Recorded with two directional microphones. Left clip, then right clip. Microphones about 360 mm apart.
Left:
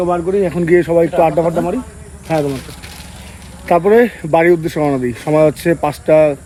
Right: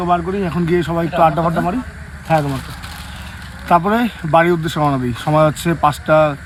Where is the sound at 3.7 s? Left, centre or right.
Centre.